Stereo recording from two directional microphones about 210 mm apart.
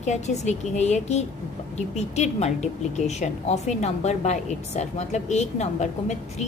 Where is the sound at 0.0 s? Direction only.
35° left (ahead or behind).